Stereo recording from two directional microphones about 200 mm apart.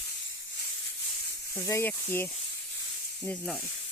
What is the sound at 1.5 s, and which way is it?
Speech, 15° left (ahead or behind).